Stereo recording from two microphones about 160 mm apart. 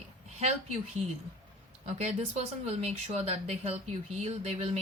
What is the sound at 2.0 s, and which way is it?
Speech, 40° right (ahead or behind).